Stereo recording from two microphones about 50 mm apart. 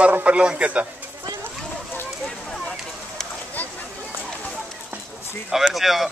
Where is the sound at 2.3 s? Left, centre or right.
Centre.